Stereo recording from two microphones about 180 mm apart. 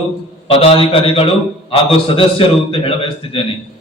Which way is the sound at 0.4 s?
30° left (ahead or behind).